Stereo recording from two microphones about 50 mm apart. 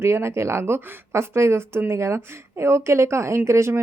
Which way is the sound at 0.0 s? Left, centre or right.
Right.